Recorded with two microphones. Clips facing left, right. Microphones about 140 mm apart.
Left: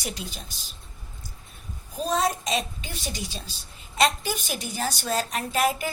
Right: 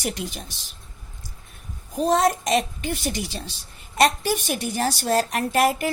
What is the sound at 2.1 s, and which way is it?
Speech, 70° right (ahead or behind).